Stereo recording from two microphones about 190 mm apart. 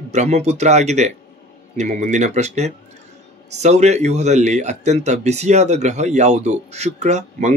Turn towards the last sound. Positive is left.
turn(degrees=-35)  # may be behind; listen again after turning